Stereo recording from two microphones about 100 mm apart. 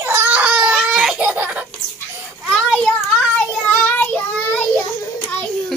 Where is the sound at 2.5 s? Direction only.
5° left (ahead or behind).